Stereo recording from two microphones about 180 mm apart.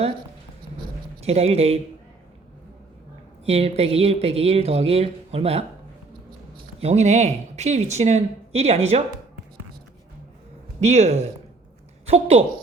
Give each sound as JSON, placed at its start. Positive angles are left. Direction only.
{"t": 1.2, "sound": "speech", "side_deg": -35}
{"t": 3.4, "sound": "speech", "side_deg": -35}
{"t": 6.7, "sound": "speech", "side_deg": -35}
{"t": 10.8, "sound": "speech", "side_deg": -35}